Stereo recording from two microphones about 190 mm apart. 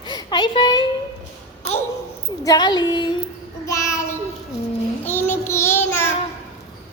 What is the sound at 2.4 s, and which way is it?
Speech, 20° left (ahead or behind).